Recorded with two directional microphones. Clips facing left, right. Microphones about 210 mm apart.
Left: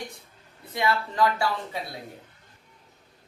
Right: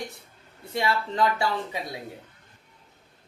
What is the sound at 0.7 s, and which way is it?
Speech, 25° right (ahead or behind).